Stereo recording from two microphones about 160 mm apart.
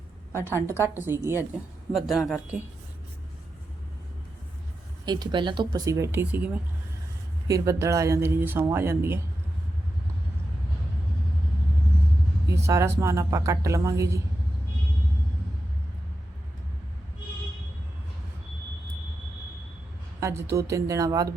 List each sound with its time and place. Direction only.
0.3 s a woman's voice: 15° left (ahead or behind)
0.9 s speech: 15° right (ahead or behind)
1.9 s speech: centre (ahead or behind)
5.0 s a woman's voice: 25° right (ahead or behind)
12.5 s a woman's voice: 20° right (ahead or behind)
20.1 s a woman's voice: 20° right (ahead or behind)